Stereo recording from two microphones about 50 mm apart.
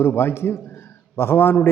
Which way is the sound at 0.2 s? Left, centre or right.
Left.